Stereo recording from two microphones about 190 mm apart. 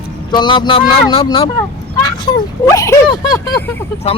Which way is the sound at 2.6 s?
20° left (ahead or behind).